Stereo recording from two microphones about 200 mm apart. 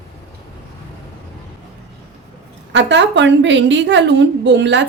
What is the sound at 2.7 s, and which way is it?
A woman's voice, 60° right (ahead or behind).